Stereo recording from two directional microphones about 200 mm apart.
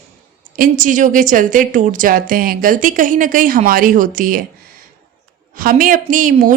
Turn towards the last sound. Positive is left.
turn(degrees=-40)  # may be behind; listen again after turning